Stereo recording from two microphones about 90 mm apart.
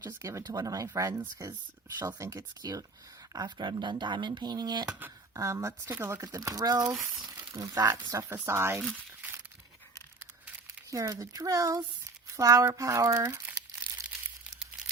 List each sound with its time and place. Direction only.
0.2 s speech: 35° right (ahead or behind)
3.3 s speech: 55° right (ahead or behind)
4.9 s speech: 20° right (ahead or behind)
5.3 s speech: 35° right (ahead or behind)
5.9 s speech: 25° right (ahead or behind)
6.2 s speech: 40° right (ahead or behind)
7.3 s a sound: 40° right (ahead or behind)
7.7 s speech: 45° right (ahead or behind); by 8.8 s 30° right (ahead or behind)
10.9 s speech: 35° right (ahead or behind)